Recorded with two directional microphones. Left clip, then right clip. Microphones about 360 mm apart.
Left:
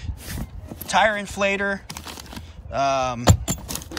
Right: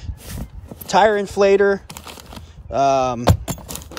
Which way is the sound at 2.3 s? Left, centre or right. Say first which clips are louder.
Right 5 dB; centre.